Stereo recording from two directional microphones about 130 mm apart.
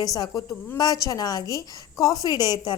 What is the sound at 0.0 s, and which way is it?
A woman's voice, 30° left (ahead or behind).